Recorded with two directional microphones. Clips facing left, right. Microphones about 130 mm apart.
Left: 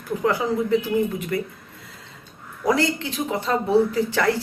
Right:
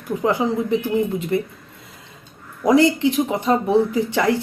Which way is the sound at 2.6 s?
20° right (ahead or behind).